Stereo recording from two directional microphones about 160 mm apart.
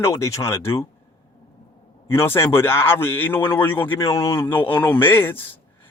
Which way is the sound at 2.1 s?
15° left (ahead or behind).